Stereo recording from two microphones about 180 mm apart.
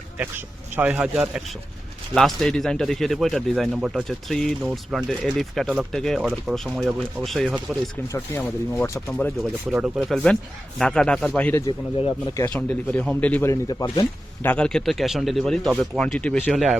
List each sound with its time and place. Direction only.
0.2 s a man's voice: 10° right (ahead or behind)
8.0 s speech: 15° left (ahead or behind)
9.7 s a man's voice: 5° right (ahead or behind)
11.6 s speech: 30° left (ahead or behind)
12.4 s speech: 10° left (ahead or behind)
14.4 s a man's voice: 5° left (ahead or behind)